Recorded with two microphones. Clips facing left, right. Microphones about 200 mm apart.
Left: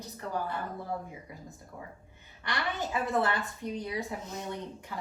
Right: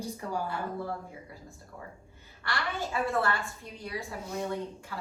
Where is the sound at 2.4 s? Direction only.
20° left (ahead or behind).